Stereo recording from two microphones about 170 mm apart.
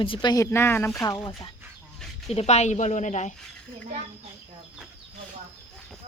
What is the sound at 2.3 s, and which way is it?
Speech, 40° left (ahead or behind).